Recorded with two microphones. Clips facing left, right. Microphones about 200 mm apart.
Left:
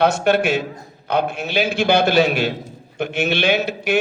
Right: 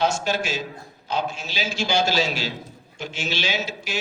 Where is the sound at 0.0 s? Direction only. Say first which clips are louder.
Left 7 dB; 60° left (ahead or behind).